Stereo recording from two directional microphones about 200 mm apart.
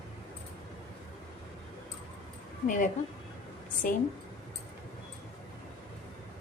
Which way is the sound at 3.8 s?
45° left (ahead or behind).